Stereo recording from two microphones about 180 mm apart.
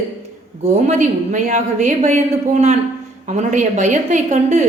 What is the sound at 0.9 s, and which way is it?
A woman's voice, 40° right (ahead or behind).